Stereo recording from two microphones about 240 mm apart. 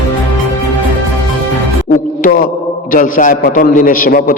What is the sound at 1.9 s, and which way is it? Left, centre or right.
A man's voice, left.